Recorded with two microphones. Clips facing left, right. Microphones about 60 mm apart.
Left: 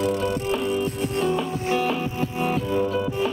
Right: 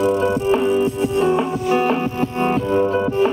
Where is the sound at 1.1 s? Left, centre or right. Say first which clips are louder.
Right 5 dB; right.